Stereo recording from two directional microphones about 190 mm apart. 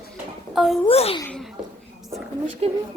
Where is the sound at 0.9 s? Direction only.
30° left (ahead or behind).